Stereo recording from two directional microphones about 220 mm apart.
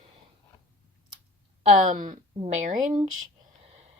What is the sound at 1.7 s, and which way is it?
A woman's voice, 35° right (ahead or behind).